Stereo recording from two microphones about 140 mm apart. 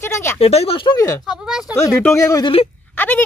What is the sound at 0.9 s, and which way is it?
Speech, 25° left (ahead or behind).